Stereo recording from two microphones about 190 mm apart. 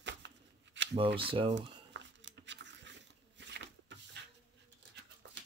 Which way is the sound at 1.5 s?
70° right (ahead or behind).